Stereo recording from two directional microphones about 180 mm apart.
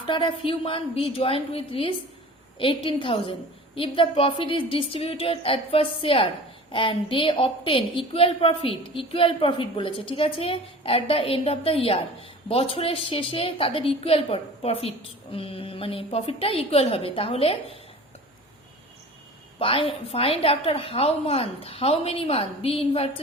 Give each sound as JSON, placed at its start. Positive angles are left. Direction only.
{"t": 0.0, "sound": "a woman's voice", "side_deg": 25}
{"t": 19.5, "sound": "a woman's voice", "side_deg": 30}